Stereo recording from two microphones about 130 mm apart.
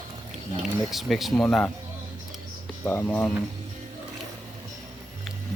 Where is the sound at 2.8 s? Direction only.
15° left (ahead or behind).